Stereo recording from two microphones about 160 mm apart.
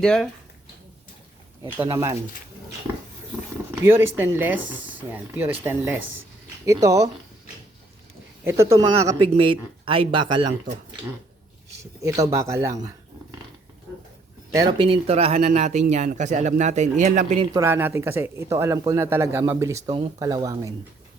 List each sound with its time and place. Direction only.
0.0 s speech: 5° left (ahead or behind)
1.6 s speech: 10° right (ahead or behind)
3.8 s speech: 15° right (ahead or behind)
8.4 s speech: 20° right (ahead or behind)
11.8 s speech: 20° right (ahead or behind)
14.5 s a man's voice: 25° right (ahead or behind); by 17.4 s 50° right (ahead or behind)
17.5 s speech: 15° right (ahead or behind)